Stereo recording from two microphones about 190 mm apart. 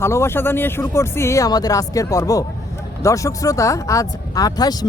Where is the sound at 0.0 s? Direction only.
15° left (ahead or behind).